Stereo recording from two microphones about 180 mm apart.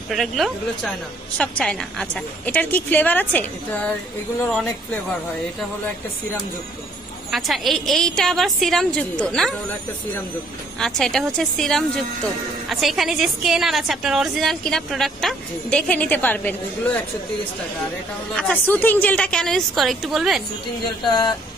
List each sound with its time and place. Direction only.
0.1 s a woman's voice: centre (ahead or behind)
7.2 s a woman's voice: centre (ahead or behind)
10.8 s a woman's voice: centre (ahead or behind)
18.3 s a woman's voice: 5° left (ahead or behind)
21.0 s a sound: 25° left (ahead or behind)